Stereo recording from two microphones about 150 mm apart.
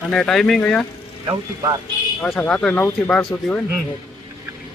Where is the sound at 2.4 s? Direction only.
10° left (ahead or behind).